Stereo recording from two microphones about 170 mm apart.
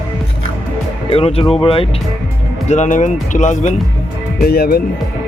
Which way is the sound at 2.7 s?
45° left (ahead or behind).